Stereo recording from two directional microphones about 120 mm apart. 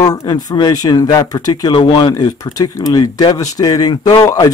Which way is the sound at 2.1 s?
30° left (ahead or behind).